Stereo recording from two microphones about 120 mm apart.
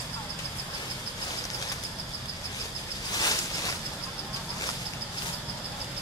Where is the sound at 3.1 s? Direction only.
30° left (ahead or behind).